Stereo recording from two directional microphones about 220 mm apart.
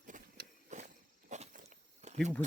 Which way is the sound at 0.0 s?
35° right (ahead or behind).